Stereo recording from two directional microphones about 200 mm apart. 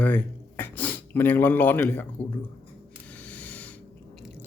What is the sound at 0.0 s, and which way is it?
Speech, 10° left (ahead or behind).